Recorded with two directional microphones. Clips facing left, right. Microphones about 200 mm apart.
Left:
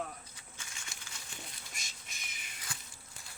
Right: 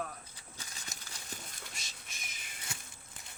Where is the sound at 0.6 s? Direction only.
35° right (ahead or behind).